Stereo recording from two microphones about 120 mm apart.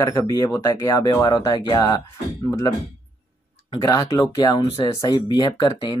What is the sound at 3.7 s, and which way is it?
Speech, 35° left (ahead or behind).